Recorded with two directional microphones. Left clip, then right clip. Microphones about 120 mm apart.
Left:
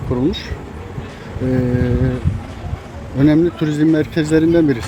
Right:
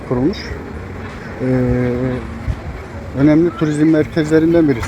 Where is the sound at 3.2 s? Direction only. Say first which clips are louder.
Right 1 dB; 35° left (ahead or behind).